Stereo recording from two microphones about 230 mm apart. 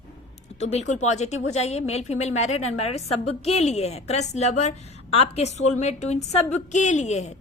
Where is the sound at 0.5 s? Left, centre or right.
Left.